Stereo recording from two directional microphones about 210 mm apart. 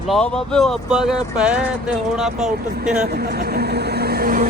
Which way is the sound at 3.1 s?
50° right (ahead or behind).